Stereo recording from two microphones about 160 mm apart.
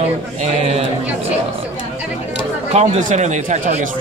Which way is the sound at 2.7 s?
45° right (ahead or behind).